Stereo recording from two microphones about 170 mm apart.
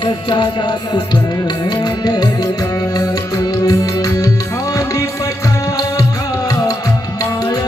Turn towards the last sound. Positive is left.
turn(degrees=20)  # may be behind; listen again after turning